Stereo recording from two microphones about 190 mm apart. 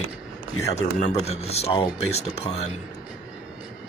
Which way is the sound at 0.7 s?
35° left (ahead or behind).